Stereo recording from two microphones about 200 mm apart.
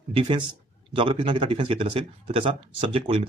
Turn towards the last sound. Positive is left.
turn(degrees=-30)  # may be behind; listen again after turning